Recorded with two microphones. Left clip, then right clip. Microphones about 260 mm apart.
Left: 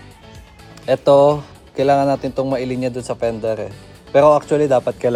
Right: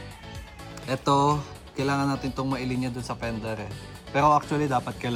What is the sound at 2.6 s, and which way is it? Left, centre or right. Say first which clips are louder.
Speech: left 10 dB; centre.